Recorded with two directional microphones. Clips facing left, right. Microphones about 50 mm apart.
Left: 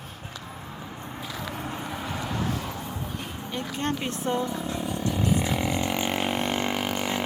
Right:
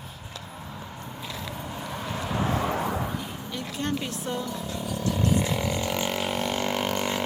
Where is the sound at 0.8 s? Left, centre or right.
Centre.